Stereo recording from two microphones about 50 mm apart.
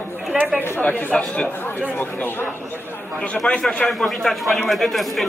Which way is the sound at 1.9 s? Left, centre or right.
Left.